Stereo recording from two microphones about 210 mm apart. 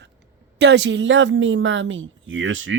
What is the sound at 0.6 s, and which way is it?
Speech, 55° right (ahead or behind).